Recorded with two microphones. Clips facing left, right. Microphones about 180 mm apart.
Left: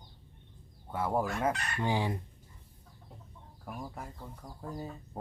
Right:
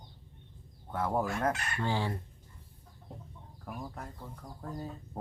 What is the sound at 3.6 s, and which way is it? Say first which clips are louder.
Speech: even; 5° left (ahead or behind).